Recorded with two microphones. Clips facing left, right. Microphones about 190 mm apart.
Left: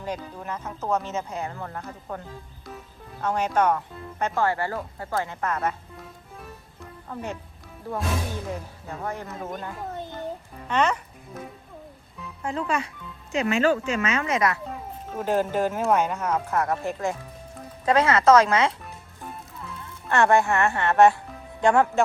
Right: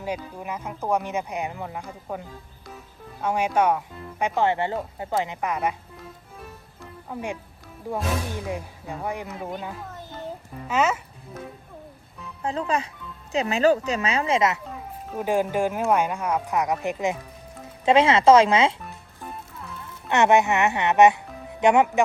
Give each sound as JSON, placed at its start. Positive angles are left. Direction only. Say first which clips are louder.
{"t": 0.0, "sound": "speech", "louder": "right 2 dB", "side_deg": -10}
{"t": 2.2, "sound": "music", "louder": "left 1 dB", "side_deg": 0}
{"t": 4.4, "sound": "speech", "louder": "right 3 dB", "side_deg": -20}
{"t": 7.1, "sound": "speech", "louder": "right 2 dB", "side_deg": -10}
{"t": 9.5, "sound": "speech", "louder": "even", "side_deg": -5}
{"t": 12.4, "sound": "speech", "louder": "right 1 dB", "side_deg": -35}
{"t": 15.1, "sound": "speech", "louder": "right 1 dB", "side_deg": -10}
{"t": 20.1, "sound": "speech", "louder": "right 1 dB", "side_deg": -20}